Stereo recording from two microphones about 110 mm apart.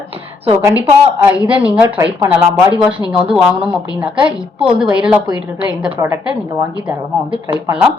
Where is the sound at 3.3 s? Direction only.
5° right (ahead or behind).